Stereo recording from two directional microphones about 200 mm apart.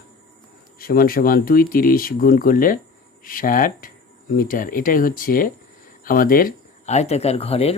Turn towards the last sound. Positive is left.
turn(degrees=30)  # may be behind; listen again after turning